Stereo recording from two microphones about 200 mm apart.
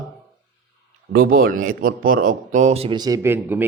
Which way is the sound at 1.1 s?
45° right (ahead or behind).